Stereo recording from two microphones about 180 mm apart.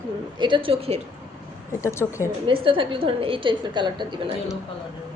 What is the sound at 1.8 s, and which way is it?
Speech, 15° left (ahead or behind).